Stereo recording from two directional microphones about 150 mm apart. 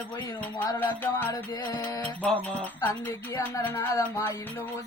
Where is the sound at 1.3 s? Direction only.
25° left (ahead or behind).